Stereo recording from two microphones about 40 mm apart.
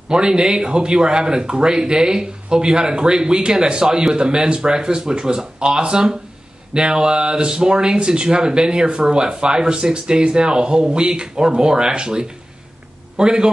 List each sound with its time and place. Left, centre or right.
0.1 s speech: right